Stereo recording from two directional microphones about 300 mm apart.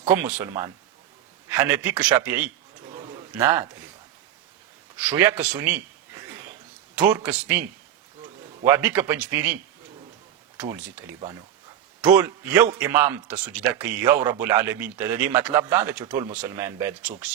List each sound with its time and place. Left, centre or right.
0.0 s speech: centre
2.9 s a sound: centre
5.0 s speech: centre
5.4 s a man's voice: centre
7.1 s speech: centre
8.6 s speech: centre
10.6 s speech: centre